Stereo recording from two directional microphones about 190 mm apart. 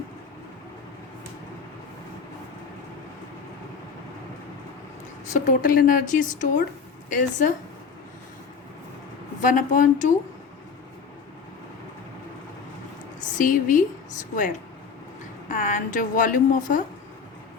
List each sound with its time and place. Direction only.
5.3 s a woman's voice: 45° left (ahead or behind)
9.4 s a woman's voice: 45° left (ahead or behind)
13.2 s a woman's voice: 40° left (ahead or behind)